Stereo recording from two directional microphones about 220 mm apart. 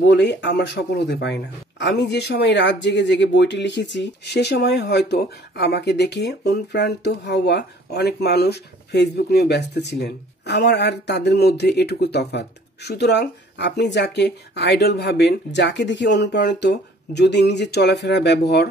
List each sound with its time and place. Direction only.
0.0 s speech: 50° left (ahead or behind)